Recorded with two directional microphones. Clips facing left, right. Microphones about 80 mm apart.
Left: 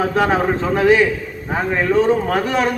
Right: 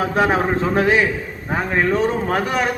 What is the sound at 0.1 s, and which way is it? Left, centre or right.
A man's voice, centre.